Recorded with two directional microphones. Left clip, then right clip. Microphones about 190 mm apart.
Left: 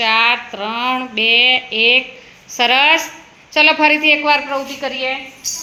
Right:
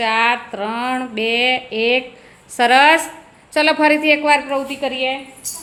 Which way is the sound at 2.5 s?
15° right (ahead or behind).